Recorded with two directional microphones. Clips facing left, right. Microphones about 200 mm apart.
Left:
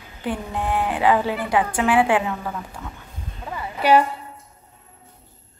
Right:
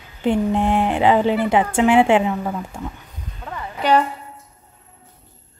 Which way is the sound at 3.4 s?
10° left (ahead or behind).